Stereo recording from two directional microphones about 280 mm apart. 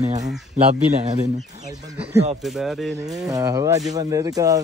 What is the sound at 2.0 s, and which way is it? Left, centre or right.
Speech, right.